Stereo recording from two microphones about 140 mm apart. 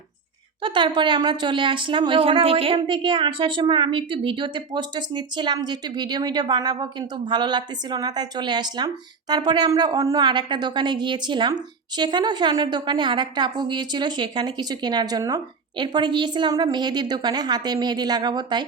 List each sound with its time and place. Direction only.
0.6 s speech: 35° right (ahead or behind)